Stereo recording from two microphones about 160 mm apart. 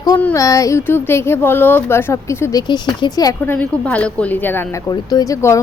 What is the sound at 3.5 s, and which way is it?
A woman's voice, 10° left (ahead or behind).